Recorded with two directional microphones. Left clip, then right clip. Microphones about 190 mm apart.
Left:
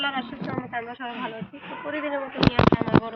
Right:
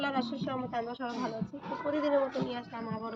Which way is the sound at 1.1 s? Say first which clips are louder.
Left 4 dB; 10° right (ahead or behind).